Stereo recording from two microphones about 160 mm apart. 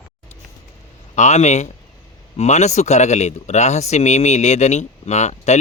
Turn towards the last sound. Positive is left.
turn(degrees=45)  # may be behind; listen again after turning